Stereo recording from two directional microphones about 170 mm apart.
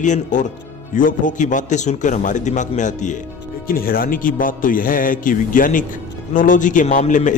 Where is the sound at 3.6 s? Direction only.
60° left (ahead or behind).